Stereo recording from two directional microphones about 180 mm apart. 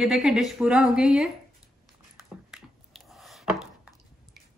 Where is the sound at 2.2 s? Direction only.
Centre (ahead or behind).